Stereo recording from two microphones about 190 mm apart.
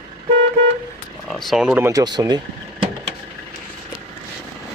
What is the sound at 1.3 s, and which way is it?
Speech, centre (ahead or behind).